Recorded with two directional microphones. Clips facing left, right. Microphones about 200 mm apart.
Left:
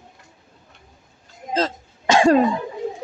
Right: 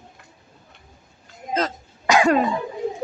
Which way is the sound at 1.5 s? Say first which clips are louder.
Left 2 dB; 30° left (ahead or behind).